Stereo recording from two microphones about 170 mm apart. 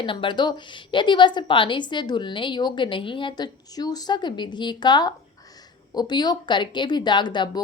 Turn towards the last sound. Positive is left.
turn(degrees=25)  # may be behind; listen again after turning